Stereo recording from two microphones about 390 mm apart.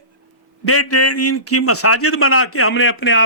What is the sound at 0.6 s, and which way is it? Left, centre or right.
A man's voice, left.